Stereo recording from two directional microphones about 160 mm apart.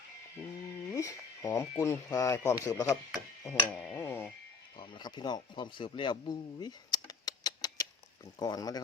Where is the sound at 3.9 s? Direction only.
15° left (ahead or behind).